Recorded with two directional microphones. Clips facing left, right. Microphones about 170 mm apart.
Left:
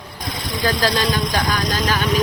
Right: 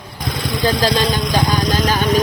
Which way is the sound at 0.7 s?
25° right (ahead or behind).